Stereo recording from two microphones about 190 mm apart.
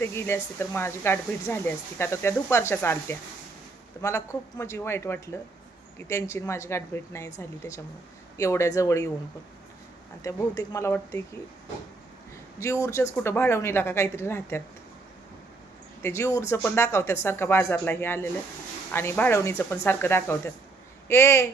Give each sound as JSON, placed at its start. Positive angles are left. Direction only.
{"t": 0.0, "sound": "speech", "side_deg": 15}
{"t": 10.2, "sound": "speech", "side_deg": 20}
{"t": 12.8, "sound": "speech", "side_deg": 15}
{"t": 16.0, "sound": "speech", "side_deg": 15}